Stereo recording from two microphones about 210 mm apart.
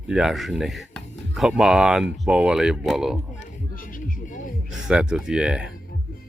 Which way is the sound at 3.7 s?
40° left (ahead or behind).